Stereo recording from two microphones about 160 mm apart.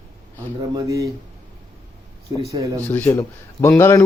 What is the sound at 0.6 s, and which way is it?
Speech, 20° right (ahead or behind).